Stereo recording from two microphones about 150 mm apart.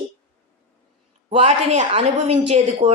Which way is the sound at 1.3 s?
45° right (ahead or behind).